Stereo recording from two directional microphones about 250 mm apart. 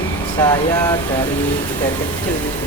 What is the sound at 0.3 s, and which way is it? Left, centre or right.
Speech, centre.